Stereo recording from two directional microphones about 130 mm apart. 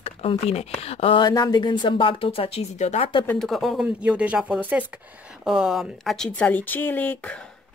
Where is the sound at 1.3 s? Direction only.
30° left (ahead or behind); by 3.1 s 55° left (ahead or behind).